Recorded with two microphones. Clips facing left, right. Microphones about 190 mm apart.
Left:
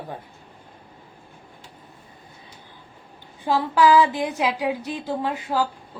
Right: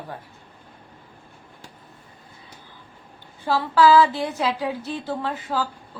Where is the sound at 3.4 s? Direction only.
15° left (ahead or behind).